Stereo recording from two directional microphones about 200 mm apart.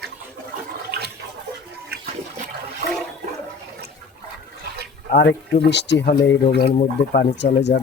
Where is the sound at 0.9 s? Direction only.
55° right (ahead or behind).